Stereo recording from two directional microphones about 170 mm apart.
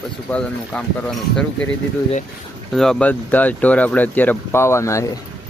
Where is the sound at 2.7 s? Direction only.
5° left (ahead or behind).